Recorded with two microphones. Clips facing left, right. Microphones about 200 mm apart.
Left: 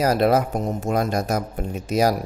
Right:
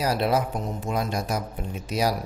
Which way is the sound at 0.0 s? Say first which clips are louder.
Left 5 dB; 50° left (ahead or behind).